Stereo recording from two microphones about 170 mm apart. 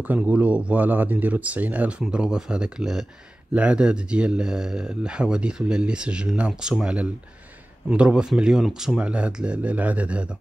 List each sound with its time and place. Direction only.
0.0 s speech: 10° right (ahead or behind)